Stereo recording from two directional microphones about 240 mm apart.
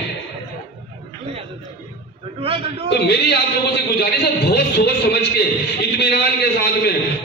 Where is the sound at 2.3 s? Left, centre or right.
Right.